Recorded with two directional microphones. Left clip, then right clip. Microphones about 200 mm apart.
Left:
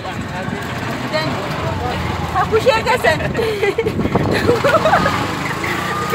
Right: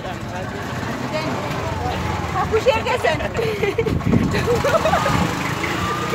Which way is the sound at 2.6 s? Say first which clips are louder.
Left 3 dB; 15° left (ahead or behind).